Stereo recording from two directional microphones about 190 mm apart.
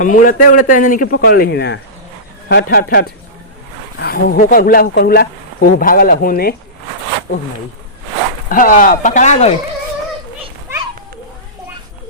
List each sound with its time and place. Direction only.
0.0 s speech: 45° left (ahead or behind)
8.4 s speech: 45° left (ahead or behind)